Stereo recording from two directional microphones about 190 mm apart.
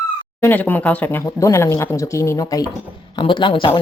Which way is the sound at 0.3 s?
10° left (ahead or behind).